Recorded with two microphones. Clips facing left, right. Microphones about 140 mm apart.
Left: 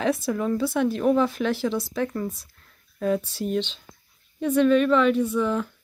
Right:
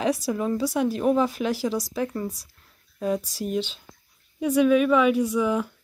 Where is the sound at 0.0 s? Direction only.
35° right (ahead or behind).